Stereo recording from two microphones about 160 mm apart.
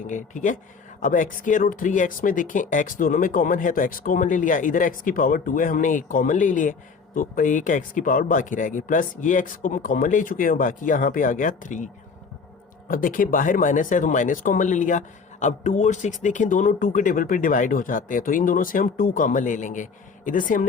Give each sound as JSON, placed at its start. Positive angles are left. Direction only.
{"t": 0.1, "sound": "speech", "side_deg": 50}
{"t": 12.9, "sound": "speech", "side_deg": 60}